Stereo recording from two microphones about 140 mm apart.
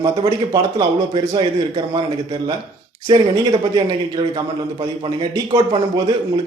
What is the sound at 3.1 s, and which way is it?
A man's voice, 35° right (ahead or behind).